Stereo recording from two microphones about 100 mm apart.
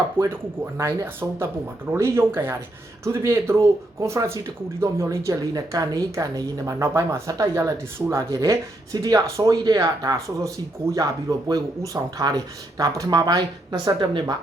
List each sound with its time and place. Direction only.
0.2 s speech: 25° right (ahead or behind); by 14.3 s 50° right (ahead or behind)